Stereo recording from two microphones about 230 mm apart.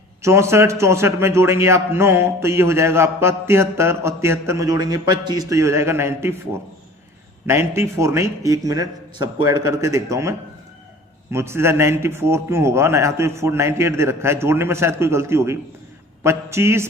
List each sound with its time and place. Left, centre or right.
0.2 s a man's voice: centre
7.4 s a man's voice: centre